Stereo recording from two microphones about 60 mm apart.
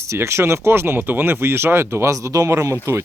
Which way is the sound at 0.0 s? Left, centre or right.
Right.